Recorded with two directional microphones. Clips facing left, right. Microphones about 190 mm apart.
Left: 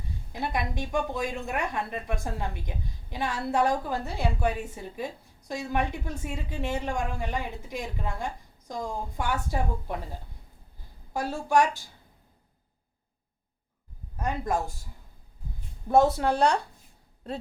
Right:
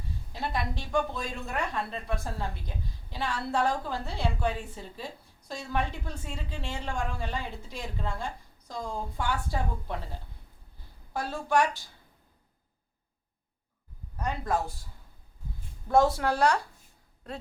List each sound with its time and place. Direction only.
0.3 s a woman's voice: 15° left (ahead or behind)
11.1 s a woman's voice: 15° left (ahead or behind)
14.3 s a woman's voice: 15° left (ahead or behind)
16.1 s speech: 20° left (ahead or behind)